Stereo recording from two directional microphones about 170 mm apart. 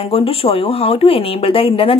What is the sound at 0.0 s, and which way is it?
Speech, 35° left (ahead or behind).